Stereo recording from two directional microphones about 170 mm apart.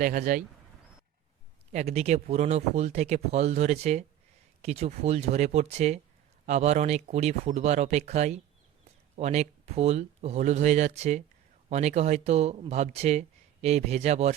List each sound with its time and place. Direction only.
0.0 s speech: 55° right (ahead or behind)
1.7 s speech: 40° right (ahead or behind)